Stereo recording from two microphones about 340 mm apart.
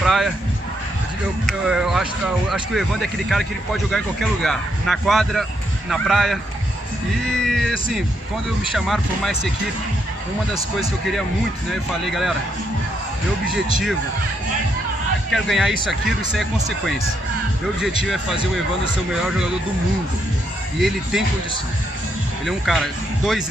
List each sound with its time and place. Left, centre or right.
0.0 s a sound: centre
1.4 s a sound: centre
2.5 s speech: centre
10.5 s speech: centre
15.3 s speech: centre
18.0 s speech: centre
22.5 s speech: centre